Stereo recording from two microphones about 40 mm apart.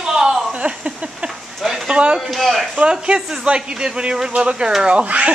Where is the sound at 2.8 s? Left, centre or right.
Right.